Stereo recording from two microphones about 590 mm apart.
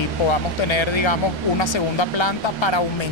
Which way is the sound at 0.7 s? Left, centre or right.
Left.